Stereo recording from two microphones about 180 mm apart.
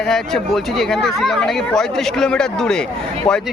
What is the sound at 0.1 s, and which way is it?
Speech, centre (ahead or behind).